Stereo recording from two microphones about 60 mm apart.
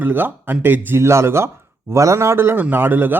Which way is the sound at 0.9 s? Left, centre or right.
Right.